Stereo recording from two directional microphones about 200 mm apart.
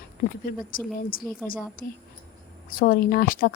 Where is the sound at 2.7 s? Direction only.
45° left (ahead or behind).